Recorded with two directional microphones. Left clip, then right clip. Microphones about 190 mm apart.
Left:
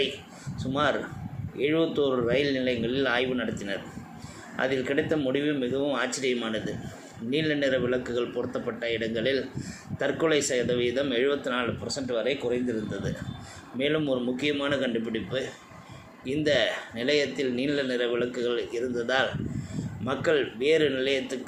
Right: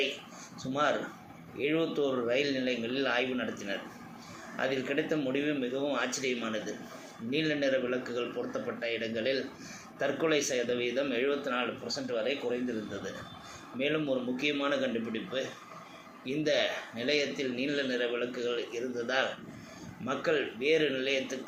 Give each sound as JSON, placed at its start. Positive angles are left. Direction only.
{"t": 0.6, "sound": "a man's voice", "side_deg": 45}
{"t": 13.7, "sound": "a man's voice", "side_deg": 40}